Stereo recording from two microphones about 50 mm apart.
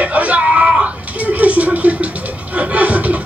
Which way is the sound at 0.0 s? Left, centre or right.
Right.